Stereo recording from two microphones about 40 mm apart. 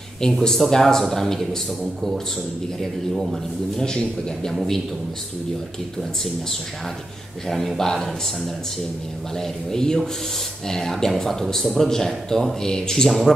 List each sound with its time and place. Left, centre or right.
0.4 s speech: centre
3.7 s a man's voice: centre
7.4 s a man's voice: centre
9.4 s speech: centre